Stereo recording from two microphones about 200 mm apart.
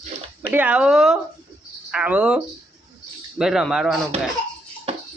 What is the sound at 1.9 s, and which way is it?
Cricket, 5° right (ahead or behind).